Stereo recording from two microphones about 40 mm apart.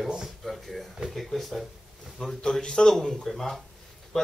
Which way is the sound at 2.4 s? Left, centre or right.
Centre.